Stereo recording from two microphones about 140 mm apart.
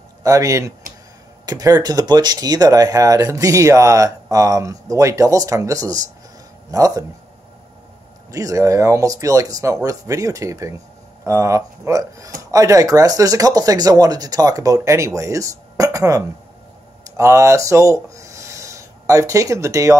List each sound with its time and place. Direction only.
0.2 s speech: 25° right (ahead or behind)
8.3 s speech: 25° right (ahead or behind)